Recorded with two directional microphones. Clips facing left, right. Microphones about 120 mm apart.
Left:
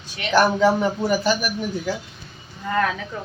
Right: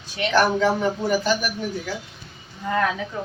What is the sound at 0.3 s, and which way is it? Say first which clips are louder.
Speech: left 2 dB; 5° left (ahead or behind).